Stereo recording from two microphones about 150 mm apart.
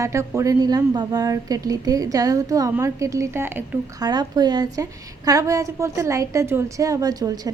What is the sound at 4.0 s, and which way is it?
A woman's voice, 25° right (ahead or behind).